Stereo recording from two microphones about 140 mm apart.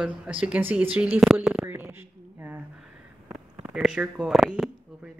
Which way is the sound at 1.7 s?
15° right (ahead or behind).